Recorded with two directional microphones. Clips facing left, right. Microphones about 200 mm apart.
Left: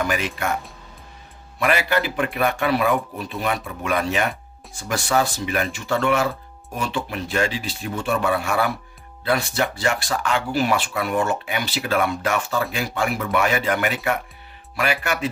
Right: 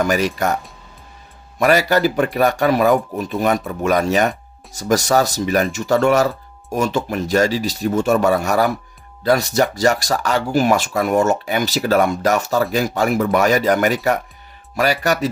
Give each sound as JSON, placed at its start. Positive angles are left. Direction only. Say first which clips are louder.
{"t": 0.0, "sound": "speech", "louder": "right 6 dB", "side_deg": -40}
{"t": 1.6, "sound": "speech", "louder": "right 6 dB", "side_deg": -40}